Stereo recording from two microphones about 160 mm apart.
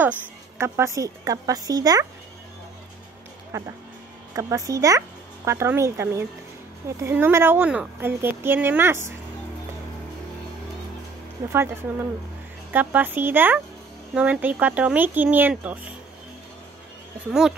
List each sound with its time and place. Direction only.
0.6 s speech: 15° right (ahead or behind)
3.5 s speech: 20° right (ahead or behind)
11.5 s speech: 15° right (ahead or behind)
17.3 s speech: 5° right (ahead or behind)